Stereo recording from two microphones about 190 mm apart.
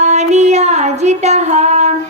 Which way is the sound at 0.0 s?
35° right (ahead or behind).